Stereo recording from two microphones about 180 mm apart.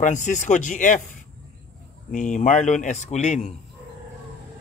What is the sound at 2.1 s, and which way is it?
Speech, 45° left (ahead or behind).